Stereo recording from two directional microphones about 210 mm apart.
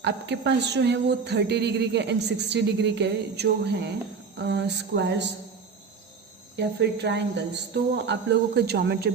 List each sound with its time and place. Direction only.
0.0 s a man's voice: 55° right (ahead or behind)
6.6 s a man's voice: 55° right (ahead or behind)